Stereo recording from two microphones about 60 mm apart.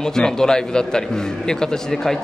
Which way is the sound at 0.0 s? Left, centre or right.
Centre.